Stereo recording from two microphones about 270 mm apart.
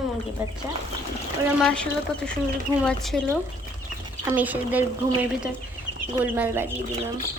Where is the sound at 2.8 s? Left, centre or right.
Centre.